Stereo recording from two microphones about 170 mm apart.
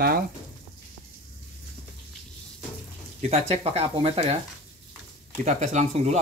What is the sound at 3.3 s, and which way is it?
Speech, 35° right (ahead or behind).